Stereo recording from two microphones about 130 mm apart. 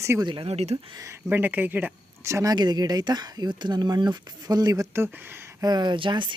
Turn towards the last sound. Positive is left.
turn(degrees=-40)  # may be behind; listen again after turning